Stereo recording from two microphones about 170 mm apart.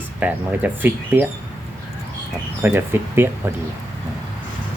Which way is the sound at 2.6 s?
15° right (ahead or behind).